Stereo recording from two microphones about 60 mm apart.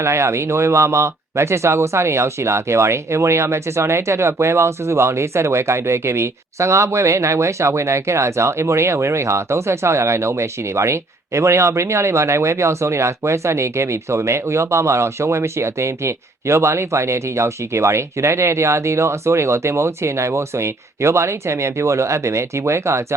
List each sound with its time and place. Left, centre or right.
0.0 s speech: right